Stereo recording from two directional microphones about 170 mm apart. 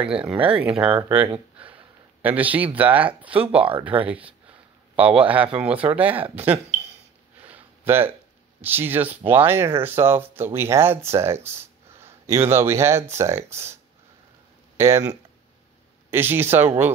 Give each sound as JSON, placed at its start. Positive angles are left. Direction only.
{"t": 0.0, "sound": "speech", "side_deg": -5}
{"t": 1.2, "sound": "speech", "side_deg": -30}
{"t": 2.2, "sound": "speech", "side_deg": -10}
{"t": 7.4, "sound": "a sound", "side_deg": -10}
{"t": 8.1, "sound": "speech", "side_deg": -10}
{"t": 14.8, "sound": "speech", "side_deg": -15}
{"t": 16.1, "sound": "speech", "side_deg": -15}